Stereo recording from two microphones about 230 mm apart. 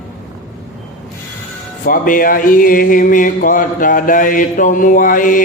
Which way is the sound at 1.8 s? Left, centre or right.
Left.